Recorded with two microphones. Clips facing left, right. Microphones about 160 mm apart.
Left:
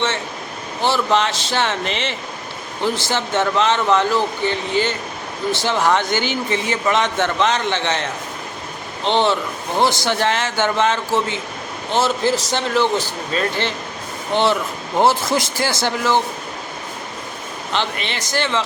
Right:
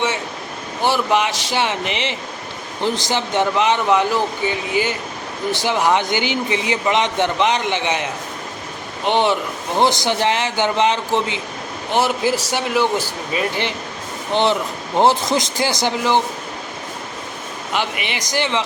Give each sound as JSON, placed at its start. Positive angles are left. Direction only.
{"t": 0.8, "sound": "speech", "side_deg": -15}
{"t": 17.7, "sound": "speech", "side_deg": -10}